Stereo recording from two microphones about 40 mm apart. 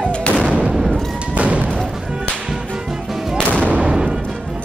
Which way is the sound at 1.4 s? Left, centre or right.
Right.